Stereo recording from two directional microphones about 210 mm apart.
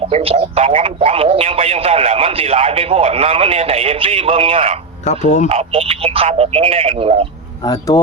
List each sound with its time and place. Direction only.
0.1 s a man's voice: 30° right (ahead or behind)
5.0 s speech: 35° left (ahead or behind)
5.5 s a man's voice: 25° right (ahead or behind)
7.7 s speech: 15° left (ahead or behind)